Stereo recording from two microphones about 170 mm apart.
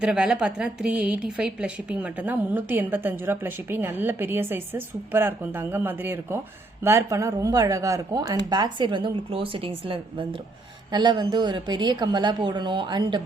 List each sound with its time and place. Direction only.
0.0 s a woman's voice: 5° right (ahead or behind); by 13.2 s 25° right (ahead or behind)